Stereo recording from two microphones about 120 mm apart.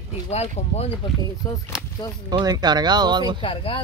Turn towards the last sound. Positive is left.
turn(degrees=45)  # may be behind; listen again after turning